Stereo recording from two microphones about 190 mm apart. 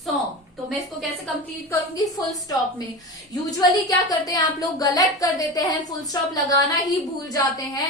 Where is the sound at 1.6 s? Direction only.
20° left (ahead or behind).